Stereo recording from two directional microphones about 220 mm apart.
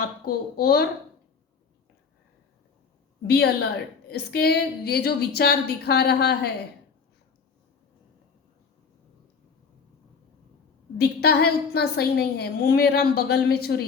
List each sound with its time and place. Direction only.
0.3 s a woman's voice: 45° left (ahead or behind)
3.2 s a woman's voice: 45° left (ahead or behind)
10.9 s a woman's voice: 45° left (ahead or behind)